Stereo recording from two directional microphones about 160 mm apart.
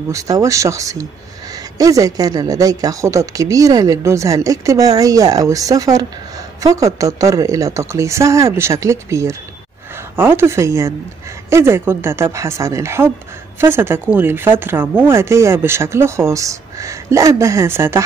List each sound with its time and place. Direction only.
0.1 s speech: 20° right (ahead or behind)